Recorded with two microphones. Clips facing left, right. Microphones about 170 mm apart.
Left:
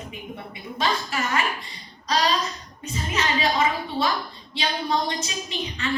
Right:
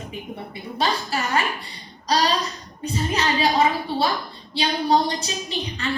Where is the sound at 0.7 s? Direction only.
35° right (ahead or behind).